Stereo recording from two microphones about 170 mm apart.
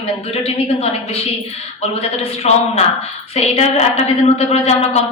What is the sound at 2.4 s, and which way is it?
A woman's voice, 40° left (ahead or behind).